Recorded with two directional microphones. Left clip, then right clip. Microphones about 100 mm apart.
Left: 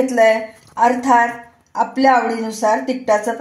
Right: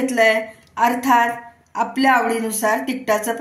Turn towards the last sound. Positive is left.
turn(degrees=60)  # may be behind; listen again after turning